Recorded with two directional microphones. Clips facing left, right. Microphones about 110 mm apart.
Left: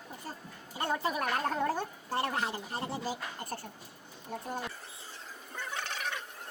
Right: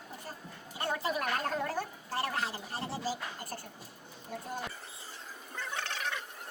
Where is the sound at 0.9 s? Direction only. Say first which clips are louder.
Left 1 dB; 15° left (ahead or behind).